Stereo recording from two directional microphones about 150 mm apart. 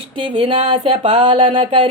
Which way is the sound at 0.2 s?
35° right (ahead or behind).